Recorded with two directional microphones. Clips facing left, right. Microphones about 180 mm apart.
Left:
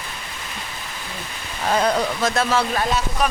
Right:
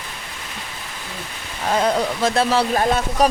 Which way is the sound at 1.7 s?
20° right (ahead or behind).